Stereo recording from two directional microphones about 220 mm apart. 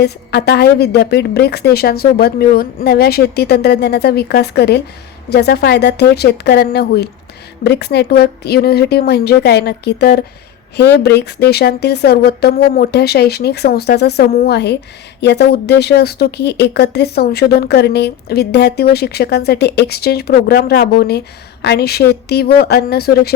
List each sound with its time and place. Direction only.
0.0 s speech: 45° left (ahead or behind)